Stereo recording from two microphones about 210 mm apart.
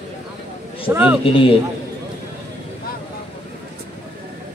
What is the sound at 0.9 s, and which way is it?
Speech, 10° right (ahead or behind).